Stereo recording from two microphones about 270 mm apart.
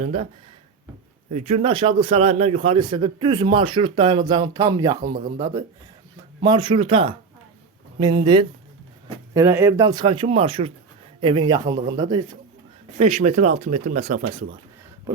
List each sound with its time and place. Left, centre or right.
0.0 s a man's voice: right
1.3 s a man's voice: right
5.1 s a man's voice: right